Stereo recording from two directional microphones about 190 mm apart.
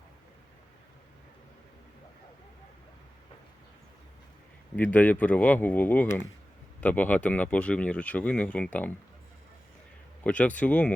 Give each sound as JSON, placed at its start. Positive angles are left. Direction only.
{"t": 4.8, "sound": "speech", "side_deg": 10}
{"t": 10.2, "sound": "speech", "side_deg": 5}